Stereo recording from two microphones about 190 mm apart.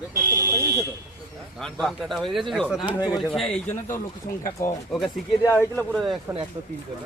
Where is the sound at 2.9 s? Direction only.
20° left (ahead or behind).